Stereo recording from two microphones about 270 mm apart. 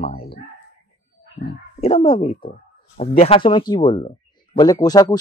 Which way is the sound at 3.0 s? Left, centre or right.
Left.